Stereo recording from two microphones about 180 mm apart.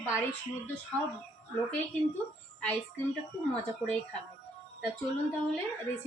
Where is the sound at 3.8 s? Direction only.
5° left (ahead or behind).